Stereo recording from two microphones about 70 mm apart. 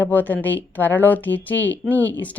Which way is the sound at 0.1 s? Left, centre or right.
Left.